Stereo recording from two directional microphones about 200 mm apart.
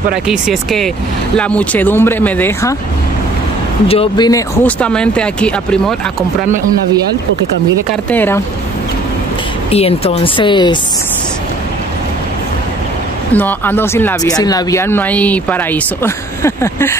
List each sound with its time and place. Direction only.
0.1 s speech: centre (ahead or behind)
3.8 s speech: 30° left (ahead or behind)
4.3 s speech: 15° left (ahead or behind)
4.7 s speech: 5° left (ahead or behind)
8.1 s speech: 10° left (ahead or behind)
9.7 s speech: 30° left (ahead or behind)
13.3 s speech: 10° left (ahead or behind)